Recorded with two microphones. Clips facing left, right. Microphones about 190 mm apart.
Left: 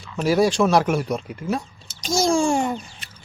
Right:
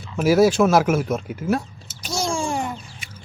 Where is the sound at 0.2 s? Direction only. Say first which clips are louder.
Right 3 dB; 5° right (ahead or behind).